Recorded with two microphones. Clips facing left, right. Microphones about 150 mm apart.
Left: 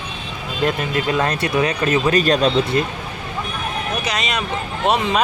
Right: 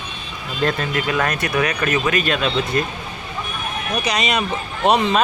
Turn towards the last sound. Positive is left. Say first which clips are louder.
# right 2 dB
turn(degrees=0)  # may be behind; listen again after turning